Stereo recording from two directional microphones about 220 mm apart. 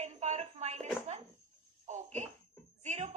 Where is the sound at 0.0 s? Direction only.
30° right (ahead or behind).